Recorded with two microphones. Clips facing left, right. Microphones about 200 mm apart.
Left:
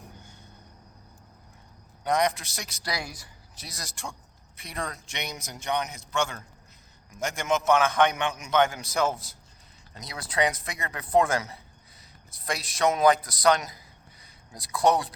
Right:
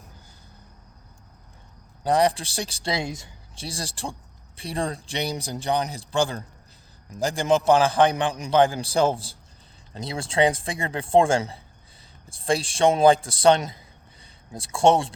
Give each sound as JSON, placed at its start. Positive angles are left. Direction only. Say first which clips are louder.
{"t": 2.0, "sound": "speech", "louder": "right 4 dB", "side_deg": -30}